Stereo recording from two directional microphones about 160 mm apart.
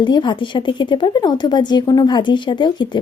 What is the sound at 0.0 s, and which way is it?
Speech, 30° left (ahead or behind).